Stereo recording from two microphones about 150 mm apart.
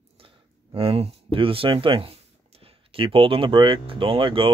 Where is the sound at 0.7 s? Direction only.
40° right (ahead or behind).